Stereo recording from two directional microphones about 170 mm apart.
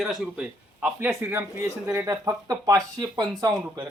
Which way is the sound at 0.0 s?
5° right (ahead or behind).